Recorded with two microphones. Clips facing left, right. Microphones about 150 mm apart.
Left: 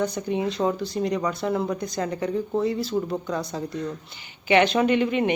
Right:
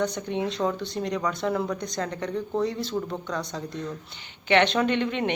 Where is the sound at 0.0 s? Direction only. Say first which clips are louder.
Left 2 dB; 5° left (ahead or behind).